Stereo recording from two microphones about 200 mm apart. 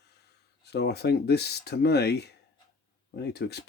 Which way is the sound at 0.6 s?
55° left (ahead or behind).